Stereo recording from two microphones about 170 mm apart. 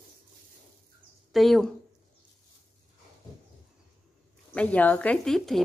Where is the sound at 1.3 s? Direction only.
Centre (ahead or behind).